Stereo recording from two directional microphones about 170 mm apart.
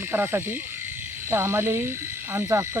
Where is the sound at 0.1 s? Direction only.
15° right (ahead or behind).